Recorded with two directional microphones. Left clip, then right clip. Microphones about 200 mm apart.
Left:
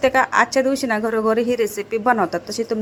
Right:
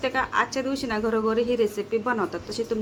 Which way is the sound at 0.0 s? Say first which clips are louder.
Left 8 dB; 35° left (ahead or behind).